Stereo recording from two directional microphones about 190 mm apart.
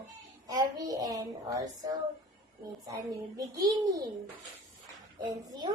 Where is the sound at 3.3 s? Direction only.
20° right (ahead or behind).